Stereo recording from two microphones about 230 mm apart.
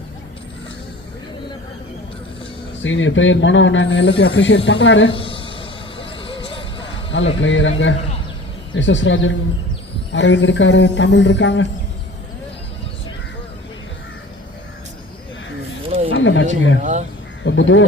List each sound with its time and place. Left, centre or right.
2.8 s a man's voice: left
5.1 s a sound: left
7.1 s a man's voice: left
15.9 s a sound: right
16.1 s wild animals: left
17.4 s crow: left